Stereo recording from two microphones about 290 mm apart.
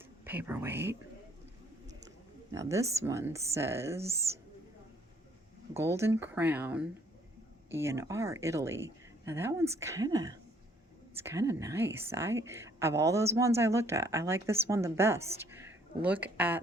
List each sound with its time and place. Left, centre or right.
0.0 s speech: centre
2.5 s speech: centre
4.0 s speech: right
5.7 s speech: centre